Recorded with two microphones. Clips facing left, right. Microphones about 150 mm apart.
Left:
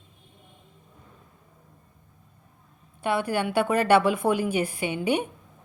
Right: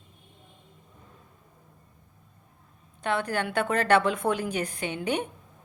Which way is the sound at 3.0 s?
10° left (ahead or behind).